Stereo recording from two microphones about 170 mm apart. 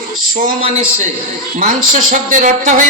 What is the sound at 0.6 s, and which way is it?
A man's voice, 40° right (ahead or behind).